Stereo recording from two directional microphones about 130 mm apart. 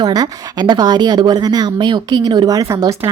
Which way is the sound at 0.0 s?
30° right (ahead or behind).